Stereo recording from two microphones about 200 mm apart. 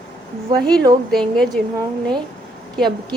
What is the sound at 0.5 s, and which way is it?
Speech, 20° right (ahead or behind).